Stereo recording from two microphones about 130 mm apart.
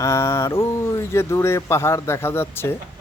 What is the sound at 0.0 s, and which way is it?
Speech, 20° left (ahead or behind).